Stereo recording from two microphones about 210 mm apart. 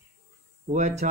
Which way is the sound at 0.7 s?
35° right (ahead or behind).